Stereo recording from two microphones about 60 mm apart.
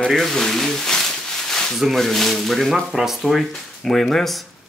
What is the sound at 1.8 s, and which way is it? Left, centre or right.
Speech, centre.